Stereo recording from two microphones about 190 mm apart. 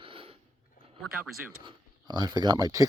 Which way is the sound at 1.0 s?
Centre (ahead or behind).